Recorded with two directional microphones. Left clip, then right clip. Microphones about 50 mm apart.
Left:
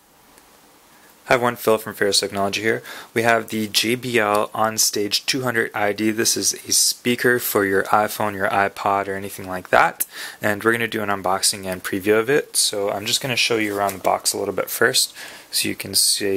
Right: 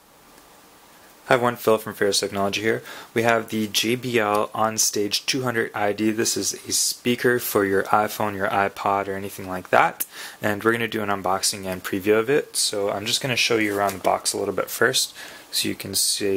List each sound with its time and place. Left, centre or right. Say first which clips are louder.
1.2 s speech: left 1 dB; left